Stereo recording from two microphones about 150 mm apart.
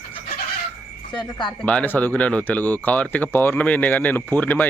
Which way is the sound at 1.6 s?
10° left (ahead or behind).